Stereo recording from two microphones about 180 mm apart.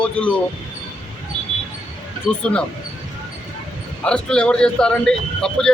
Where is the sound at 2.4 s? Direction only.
5° left (ahead or behind).